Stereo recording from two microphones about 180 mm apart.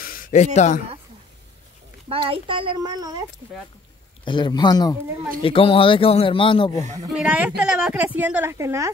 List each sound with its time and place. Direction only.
0.0 s a sound: 50° left (ahead or behind)
2.0 s a child's voice: 30° right (ahead or behind)
4.2 s speech: 25° left (ahead or behind)
7.2 s speech: 10° right (ahead or behind)